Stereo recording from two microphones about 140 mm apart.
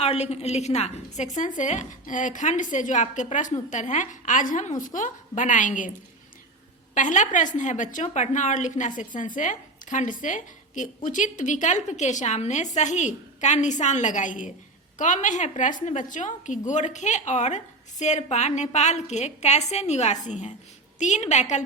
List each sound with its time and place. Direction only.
0.0 s a woman's voice: 45° left (ahead or behind); by 5.9 s 65° left (ahead or behind)
6.9 s a woman's voice: 60° left (ahead or behind)